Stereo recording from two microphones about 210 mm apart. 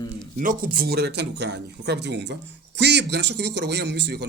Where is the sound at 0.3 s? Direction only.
40° right (ahead or behind).